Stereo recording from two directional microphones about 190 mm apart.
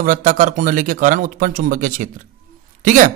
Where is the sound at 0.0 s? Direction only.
45° right (ahead or behind).